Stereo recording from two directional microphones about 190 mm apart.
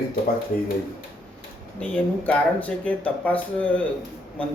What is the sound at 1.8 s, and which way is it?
A man's voice, 10° left (ahead or behind).